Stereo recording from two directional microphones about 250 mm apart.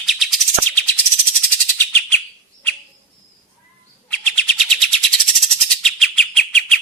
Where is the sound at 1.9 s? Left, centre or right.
Centre.